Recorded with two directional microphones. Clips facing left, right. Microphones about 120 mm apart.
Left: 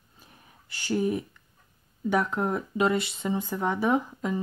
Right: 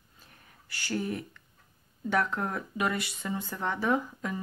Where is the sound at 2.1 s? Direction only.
15° left (ahead or behind).